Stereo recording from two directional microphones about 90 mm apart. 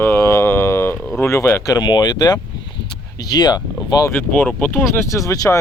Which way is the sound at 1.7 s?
50° left (ahead or behind).